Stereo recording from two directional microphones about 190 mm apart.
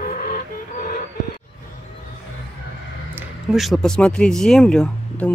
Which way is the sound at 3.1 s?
5° right (ahead or behind).